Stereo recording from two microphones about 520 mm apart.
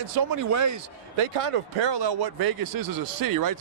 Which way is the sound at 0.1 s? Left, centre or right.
Right.